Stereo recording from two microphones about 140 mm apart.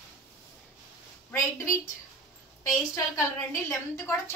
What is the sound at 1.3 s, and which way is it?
Speech, 20° left (ahead or behind).